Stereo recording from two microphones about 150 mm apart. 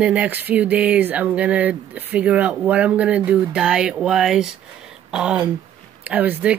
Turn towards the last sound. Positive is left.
turn(degrees=-10)  # may be behind; listen again after turning